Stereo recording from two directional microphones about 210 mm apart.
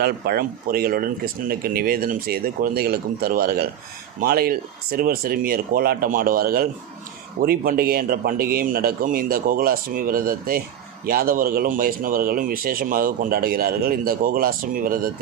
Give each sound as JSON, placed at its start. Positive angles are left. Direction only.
{"t": 0.0, "sound": "speech", "side_deg": -45}